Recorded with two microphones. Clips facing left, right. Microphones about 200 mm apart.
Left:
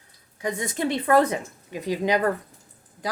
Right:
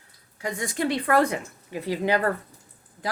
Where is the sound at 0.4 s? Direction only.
20° left (ahead or behind).